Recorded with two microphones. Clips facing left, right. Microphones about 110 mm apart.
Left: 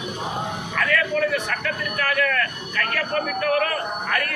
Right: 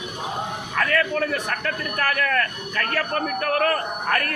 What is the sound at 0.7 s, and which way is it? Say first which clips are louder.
Speech: right 1 dB; 35° right (ahead or behind).